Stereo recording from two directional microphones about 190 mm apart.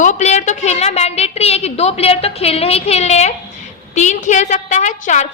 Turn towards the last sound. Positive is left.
turn(degrees=40)  # may be behind; listen again after turning